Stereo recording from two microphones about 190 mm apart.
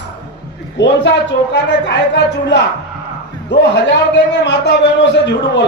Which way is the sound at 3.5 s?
65° left (ahead or behind).